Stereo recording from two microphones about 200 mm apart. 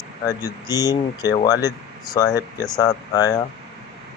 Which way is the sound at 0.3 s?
15° left (ahead or behind).